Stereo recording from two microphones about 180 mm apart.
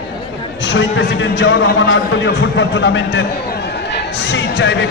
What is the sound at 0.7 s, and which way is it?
A man's voice, 90° left.